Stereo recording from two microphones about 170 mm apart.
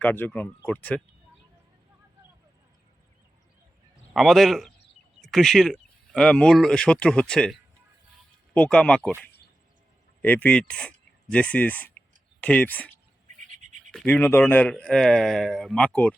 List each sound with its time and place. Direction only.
0.0 s speech: 10° left (ahead or behind)
4.1 s speech: centre (ahead or behind)
10.2 s speech: 10° left (ahead or behind)
13.6 s scratch: 45° right (ahead or behind)
13.9 s speech: 10° left (ahead or behind)